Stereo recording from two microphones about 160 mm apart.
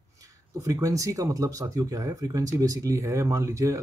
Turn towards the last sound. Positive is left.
turn(degrees=-20)  # may be behind; listen again after turning